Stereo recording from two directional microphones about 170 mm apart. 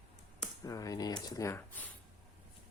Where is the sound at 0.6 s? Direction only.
20° left (ahead or behind).